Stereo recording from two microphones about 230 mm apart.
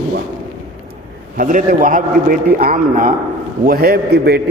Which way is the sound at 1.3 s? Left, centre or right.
Right.